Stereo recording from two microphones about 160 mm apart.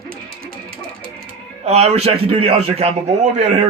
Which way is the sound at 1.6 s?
40° right (ahead or behind).